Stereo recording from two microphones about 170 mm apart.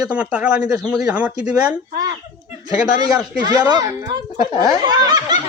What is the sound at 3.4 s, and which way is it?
Snicker, 25° right (ahead or behind).